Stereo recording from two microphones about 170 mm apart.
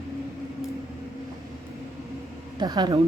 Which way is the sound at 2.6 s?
25° right (ahead or behind).